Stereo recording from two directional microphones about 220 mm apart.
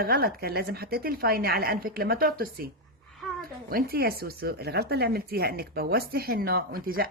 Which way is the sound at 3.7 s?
45° right (ahead or behind).